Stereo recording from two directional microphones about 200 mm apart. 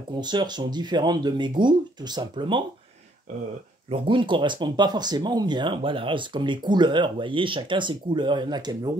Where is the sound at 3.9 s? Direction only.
25° right (ahead or behind).